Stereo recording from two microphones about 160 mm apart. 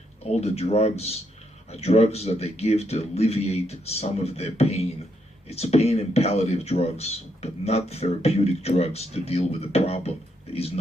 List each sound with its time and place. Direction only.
0.3 s speech: 40° left (ahead or behind)